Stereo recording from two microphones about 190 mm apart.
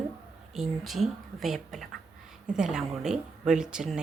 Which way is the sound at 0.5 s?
Centre (ahead or behind).